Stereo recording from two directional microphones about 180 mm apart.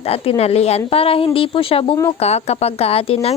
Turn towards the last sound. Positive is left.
turn(degrees=35)  # may be behind; listen again after turning